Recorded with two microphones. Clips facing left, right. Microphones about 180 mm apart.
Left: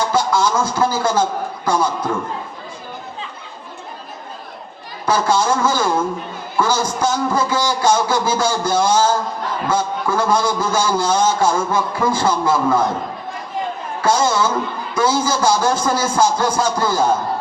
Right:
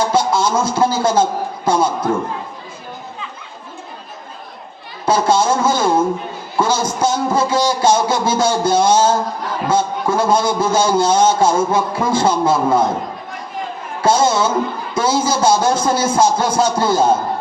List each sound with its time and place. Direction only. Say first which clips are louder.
0.1 s a man's voice: right 1 dB; 25° right (ahead or behind)
5.0 s a man's voice: right 2 dB; 25° right (ahead or behind)
14.0 s a man's voice: right 2 dB; 25° right (ahead or behind)